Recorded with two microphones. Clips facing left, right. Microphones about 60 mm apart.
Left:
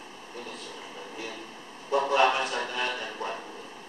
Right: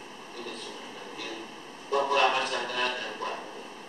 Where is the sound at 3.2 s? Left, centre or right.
Left.